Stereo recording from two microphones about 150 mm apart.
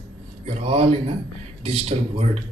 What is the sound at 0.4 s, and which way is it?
A man's voice, 45° right (ahead or behind).